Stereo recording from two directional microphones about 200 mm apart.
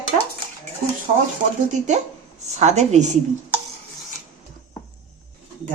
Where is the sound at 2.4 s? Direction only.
35° right (ahead or behind).